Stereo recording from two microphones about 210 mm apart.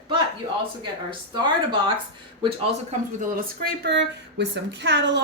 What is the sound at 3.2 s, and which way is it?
Speech, 50° right (ahead or behind).